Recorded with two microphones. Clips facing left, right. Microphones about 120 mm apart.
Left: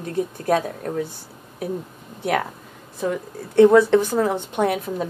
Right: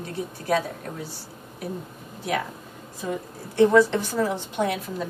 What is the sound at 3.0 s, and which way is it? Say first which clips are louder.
A woman's voice: left 5 dB; 55° left (ahead or behind).